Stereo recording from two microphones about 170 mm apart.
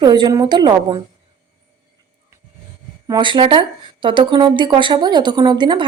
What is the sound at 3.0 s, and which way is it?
A woman's voice, 25° right (ahead or behind).